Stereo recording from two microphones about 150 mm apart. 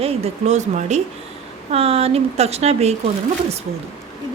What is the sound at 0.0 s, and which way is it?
Speech, 45° right (ahead or behind).